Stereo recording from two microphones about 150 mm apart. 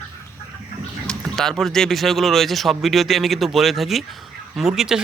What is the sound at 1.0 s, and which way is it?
A man's voice, 5° left (ahead or behind).